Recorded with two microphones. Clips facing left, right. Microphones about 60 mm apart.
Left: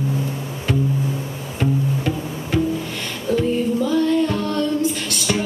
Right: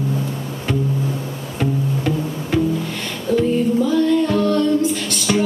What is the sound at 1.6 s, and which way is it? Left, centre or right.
Pizzicato, centre.